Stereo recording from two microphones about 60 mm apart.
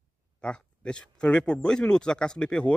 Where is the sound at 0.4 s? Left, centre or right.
Centre.